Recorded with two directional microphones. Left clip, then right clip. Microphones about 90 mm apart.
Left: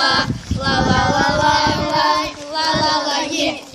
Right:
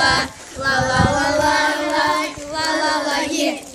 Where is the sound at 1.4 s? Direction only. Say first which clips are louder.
Left 2 dB; 20° right (ahead or behind).